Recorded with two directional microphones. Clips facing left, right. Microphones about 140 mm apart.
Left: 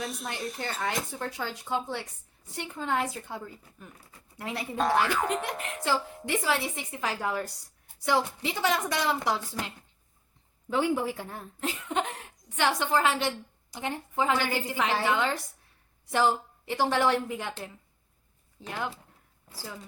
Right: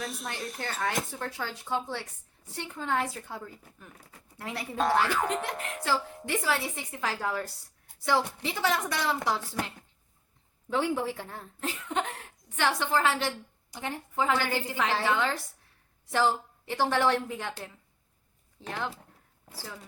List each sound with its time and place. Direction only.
0.0 s a sound: centre (ahead or behind)
0.3 s speech: centre (ahead or behind)
0.9 s a woman's voice: 15° left (ahead or behind)
10.7 s speech: 10° left (ahead or behind)